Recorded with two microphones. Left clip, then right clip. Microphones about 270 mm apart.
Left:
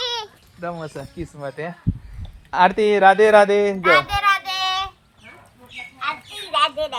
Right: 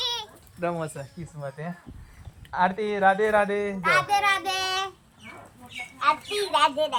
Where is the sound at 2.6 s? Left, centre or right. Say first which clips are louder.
Left 9 dB; left.